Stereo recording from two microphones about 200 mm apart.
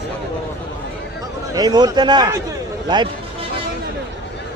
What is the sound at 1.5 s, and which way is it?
A man's voice, 20° right (ahead or behind).